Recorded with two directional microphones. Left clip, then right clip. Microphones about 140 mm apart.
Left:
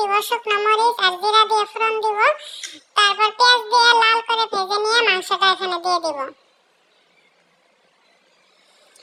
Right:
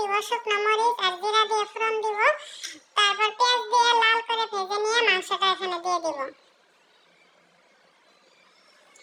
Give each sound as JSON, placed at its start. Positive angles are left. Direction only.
{"t": 0.0, "sound": "a child's voice", "side_deg": 25}
{"t": 3.1, "sound": "child singing", "side_deg": 25}
{"t": 5.3, "sound": "speech", "side_deg": 25}